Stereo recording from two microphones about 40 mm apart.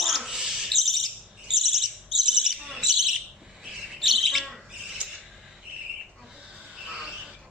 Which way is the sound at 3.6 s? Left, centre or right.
Centre.